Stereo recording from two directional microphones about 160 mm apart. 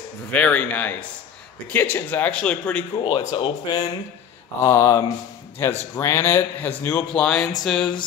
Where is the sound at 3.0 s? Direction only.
35° left (ahead or behind); by 7.5 s 5° left (ahead or behind).